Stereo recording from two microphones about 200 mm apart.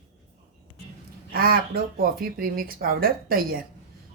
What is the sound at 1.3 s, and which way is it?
Speech, 50° right (ahead or behind).